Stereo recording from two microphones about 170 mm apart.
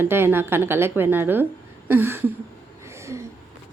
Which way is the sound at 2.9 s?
15° right (ahead or behind).